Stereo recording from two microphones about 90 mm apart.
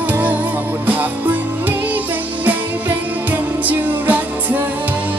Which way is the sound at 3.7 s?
20° right (ahead or behind).